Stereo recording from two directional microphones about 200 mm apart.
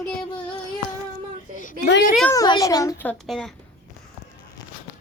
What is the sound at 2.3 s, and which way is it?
A woman's voice, 15° left (ahead or behind).